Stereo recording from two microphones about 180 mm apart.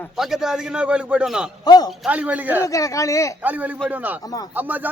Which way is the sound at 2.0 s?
10° right (ahead or behind).